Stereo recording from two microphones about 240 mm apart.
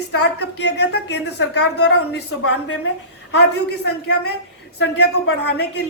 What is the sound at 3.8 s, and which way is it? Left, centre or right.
Speech, left.